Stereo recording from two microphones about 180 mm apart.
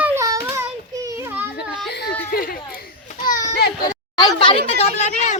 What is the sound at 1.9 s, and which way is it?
Whimper, 65° left (ahead or behind).